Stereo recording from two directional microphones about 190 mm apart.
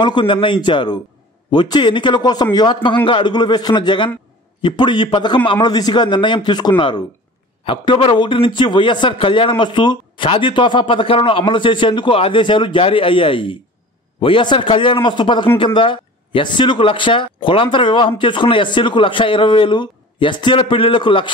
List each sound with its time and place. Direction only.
0.0 s a man's voice: 25° left (ahead or behind)